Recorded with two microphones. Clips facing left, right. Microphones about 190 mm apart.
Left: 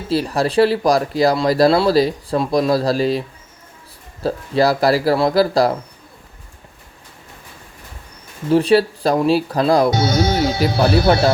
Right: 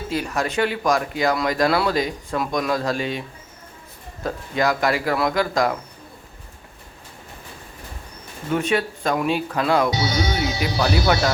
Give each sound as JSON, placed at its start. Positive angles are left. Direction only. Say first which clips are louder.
{"t": 0.1, "sound": "speech", "louder": "left 7 dB", "side_deg": 35}
{"t": 8.4, "sound": "speech", "louder": "left 8 dB", "side_deg": 35}
{"t": 9.9, "sound": "speech", "louder": "left 6 dB", "side_deg": 50}
{"t": 10.7, "sound": "speech", "louder": "left 5 dB", "side_deg": 55}